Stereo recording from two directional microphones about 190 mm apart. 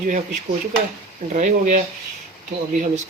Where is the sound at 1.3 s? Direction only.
40° right (ahead or behind).